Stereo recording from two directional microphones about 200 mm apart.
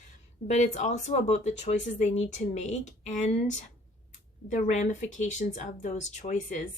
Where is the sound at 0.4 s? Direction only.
35° left (ahead or behind).